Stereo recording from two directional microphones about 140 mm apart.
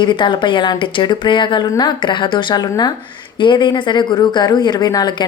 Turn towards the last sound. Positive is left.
turn(degrees=30)  # may be behind; listen again after turning